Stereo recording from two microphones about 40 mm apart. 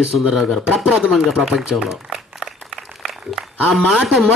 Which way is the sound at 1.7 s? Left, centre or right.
Centre.